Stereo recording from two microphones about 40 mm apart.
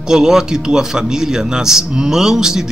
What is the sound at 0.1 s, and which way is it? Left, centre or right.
A man's voice, centre.